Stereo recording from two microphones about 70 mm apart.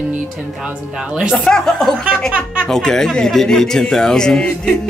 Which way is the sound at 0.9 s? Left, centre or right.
Centre.